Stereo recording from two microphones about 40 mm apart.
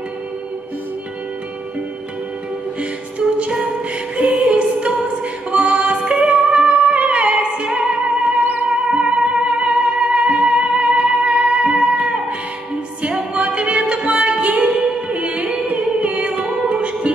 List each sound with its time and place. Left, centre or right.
2.8 s music: right
8.4 s music: right
8.6 s music: right
13.3 s music: right